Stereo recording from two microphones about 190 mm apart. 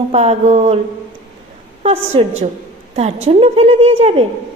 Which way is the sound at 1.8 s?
30° right (ahead or behind).